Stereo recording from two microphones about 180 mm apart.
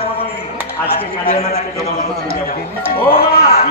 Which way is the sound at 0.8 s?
60° left (ahead or behind).